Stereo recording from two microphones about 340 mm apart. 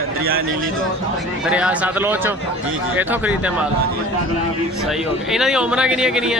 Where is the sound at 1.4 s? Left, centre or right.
Centre.